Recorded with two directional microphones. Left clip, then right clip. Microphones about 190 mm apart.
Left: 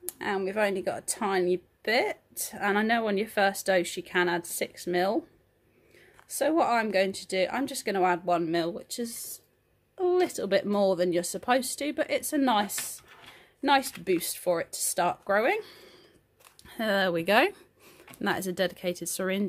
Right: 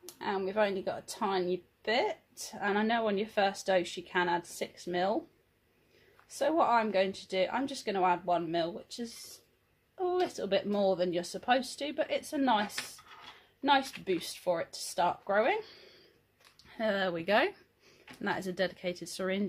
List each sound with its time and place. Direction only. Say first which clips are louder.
0.0 s a woman's voice: left 4 dB; 40° left (ahead or behind)
6.2 s speech: left 3 dB; 40° left (ahead or behind)